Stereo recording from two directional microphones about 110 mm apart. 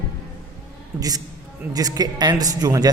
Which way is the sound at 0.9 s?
35° right (ahead or behind).